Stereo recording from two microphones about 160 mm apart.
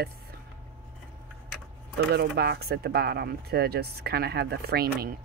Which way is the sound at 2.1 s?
90° right.